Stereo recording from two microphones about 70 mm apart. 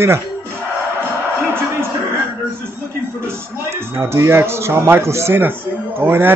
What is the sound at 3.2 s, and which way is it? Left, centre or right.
Speech, right.